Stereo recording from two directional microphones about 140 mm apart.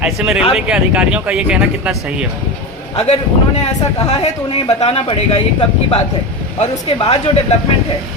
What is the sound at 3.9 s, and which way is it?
A man's voice, 40° left (ahead or behind).